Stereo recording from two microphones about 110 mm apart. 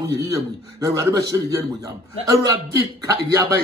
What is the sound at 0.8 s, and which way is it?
A man's voice, 30° right (ahead or behind).